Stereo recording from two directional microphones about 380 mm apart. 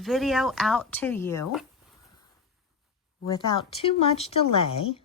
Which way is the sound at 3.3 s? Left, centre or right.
Centre.